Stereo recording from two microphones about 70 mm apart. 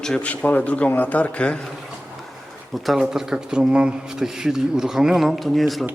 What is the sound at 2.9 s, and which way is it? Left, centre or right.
Speech, centre.